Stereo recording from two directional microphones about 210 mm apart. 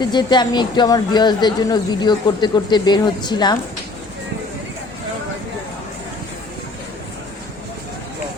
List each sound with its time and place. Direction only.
0.0 s speech: 20° left (ahead or behind)